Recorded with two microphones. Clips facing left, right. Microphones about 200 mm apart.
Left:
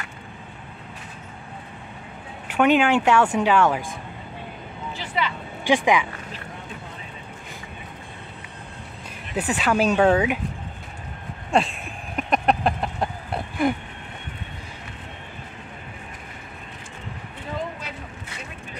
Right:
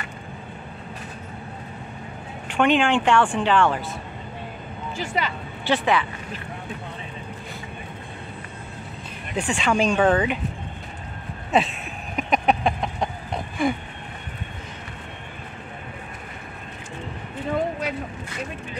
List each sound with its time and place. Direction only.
2.4 s speech: 10° left (ahead or behind)
4.9 s speech: 45° right (ahead or behind)
5.7 s speech: 15° left (ahead or behind)
9.3 s speech: 5° left (ahead or behind)
11.5 s a sound: centre (ahead or behind)